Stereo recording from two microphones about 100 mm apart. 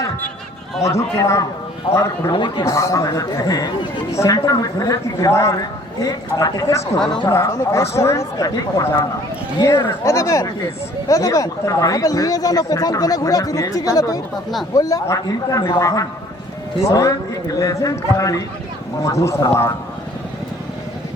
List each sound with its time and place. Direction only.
0.9 s a man's voice: 30° left (ahead or behind)
2.3 s speech: 50° left (ahead or behind)
2.6 s a man's voice: 30° left (ahead or behind)